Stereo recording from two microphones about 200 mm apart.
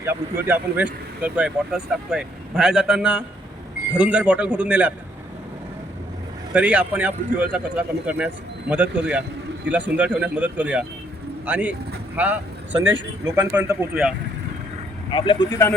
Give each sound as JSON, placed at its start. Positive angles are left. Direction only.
{"t": 0.0, "sound": "a man's voice", "side_deg": -10}
{"t": 6.5, "sound": "speech", "side_deg": -5}
{"t": 15.1, "sound": "speech", "side_deg": 25}